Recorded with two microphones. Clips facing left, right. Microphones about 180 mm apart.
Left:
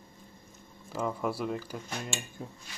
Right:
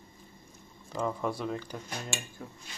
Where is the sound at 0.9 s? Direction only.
5° left (ahead or behind).